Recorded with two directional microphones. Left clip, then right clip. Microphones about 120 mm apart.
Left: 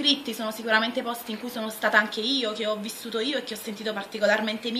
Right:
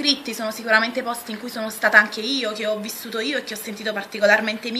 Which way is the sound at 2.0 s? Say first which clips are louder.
Right 2 dB; 45° left (ahead or behind).